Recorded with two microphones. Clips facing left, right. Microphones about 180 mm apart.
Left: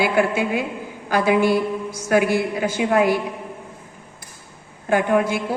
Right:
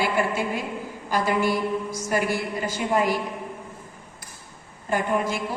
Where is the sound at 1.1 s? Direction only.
65° left (ahead or behind).